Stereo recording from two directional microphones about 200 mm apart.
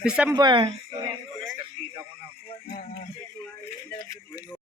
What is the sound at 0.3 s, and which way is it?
Speech, 20° right (ahead or behind).